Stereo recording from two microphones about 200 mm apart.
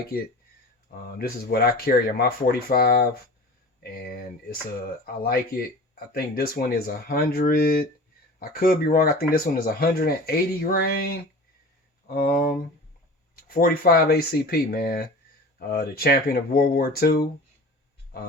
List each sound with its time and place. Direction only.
0.9 s speech: 50° left (ahead or behind)